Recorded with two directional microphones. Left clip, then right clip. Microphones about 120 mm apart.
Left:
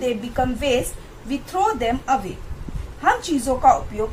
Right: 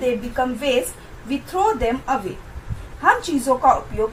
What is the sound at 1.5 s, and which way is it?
A woman's voice, 25° right (ahead or behind).